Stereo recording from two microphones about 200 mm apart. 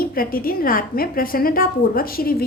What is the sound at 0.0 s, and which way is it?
A woman's voice, 45° left (ahead or behind).